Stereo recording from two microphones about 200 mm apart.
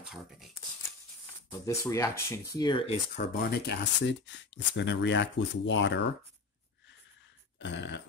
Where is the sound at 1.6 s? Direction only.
15° left (ahead or behind).